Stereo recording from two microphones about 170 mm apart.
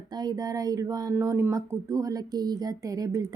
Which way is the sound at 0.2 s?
20° right (ahead or behind).